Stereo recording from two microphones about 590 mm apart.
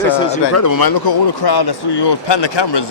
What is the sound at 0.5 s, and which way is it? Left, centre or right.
Speech, left.